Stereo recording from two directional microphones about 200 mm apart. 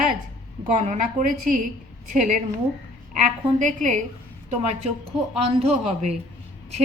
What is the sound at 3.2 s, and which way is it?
Speech, 40° right (ahead or behind).